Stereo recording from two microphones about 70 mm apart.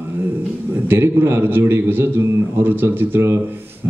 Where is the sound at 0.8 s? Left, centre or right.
Right.